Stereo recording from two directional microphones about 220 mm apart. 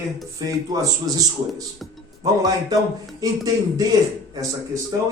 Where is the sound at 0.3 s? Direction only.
15° right (ahead or behind).